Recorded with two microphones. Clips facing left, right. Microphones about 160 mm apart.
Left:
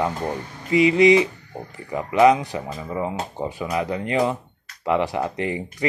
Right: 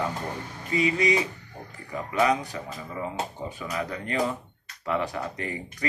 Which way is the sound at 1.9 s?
90° left.